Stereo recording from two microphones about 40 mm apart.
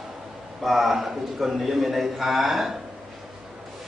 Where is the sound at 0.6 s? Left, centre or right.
Centre.